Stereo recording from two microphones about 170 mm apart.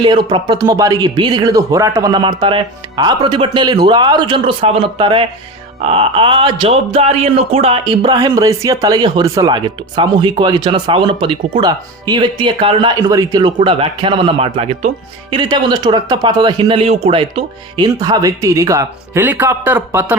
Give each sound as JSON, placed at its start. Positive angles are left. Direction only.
{"t": 0.0, "sound": "speech", "side_deg": -30}
{"t": 15.4, "sound": "speech", "side_deg": -25}